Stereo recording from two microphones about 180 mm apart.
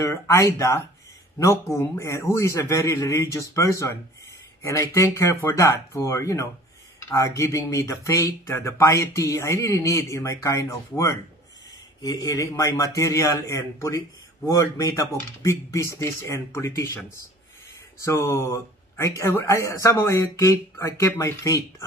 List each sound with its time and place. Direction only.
0.0 s speech: 15° left (ahead or behind)
18.0 s speech: 15° left (ahead or behind)